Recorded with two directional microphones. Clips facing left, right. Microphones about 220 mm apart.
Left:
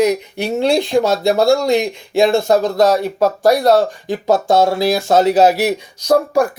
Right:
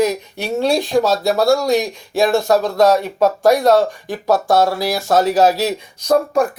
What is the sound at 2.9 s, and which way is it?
Speech, 10° left (ahead or behind).